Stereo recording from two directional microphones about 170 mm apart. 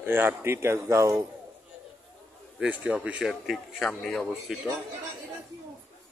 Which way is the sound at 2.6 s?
10° right (ahead or behind).